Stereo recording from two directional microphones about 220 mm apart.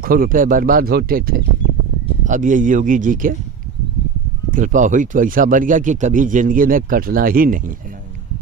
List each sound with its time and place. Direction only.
0.0 s speech: 40° right (ahead or behind)
4.5 s speech: 35° right (ahead or behind)